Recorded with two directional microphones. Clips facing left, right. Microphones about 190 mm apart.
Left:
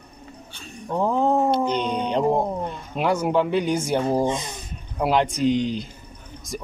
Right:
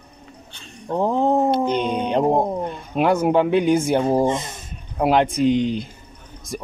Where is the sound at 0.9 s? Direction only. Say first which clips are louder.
Right 2 dB; 15° right (ahead or behind).